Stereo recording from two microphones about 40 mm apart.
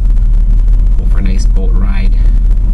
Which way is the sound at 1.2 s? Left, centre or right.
Centre.